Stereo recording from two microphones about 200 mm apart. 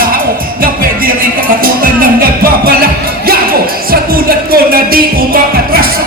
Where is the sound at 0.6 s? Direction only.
45° right (ahead or behind).